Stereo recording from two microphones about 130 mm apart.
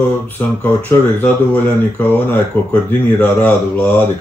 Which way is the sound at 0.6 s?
10° left (ahead or behind).